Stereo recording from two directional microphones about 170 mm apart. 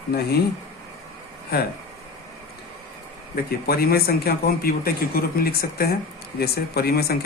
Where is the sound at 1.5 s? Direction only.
65° left (ahead or behind).